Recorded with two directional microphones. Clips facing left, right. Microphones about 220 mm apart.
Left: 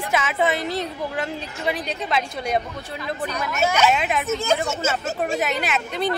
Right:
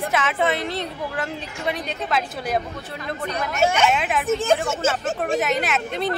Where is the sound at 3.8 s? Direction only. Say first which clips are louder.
Left 1 dB; centre (ahead or behind).